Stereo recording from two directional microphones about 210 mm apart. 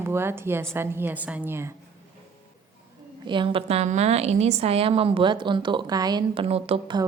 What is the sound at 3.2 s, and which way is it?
A woman's voice, 25° right (ahead or behind).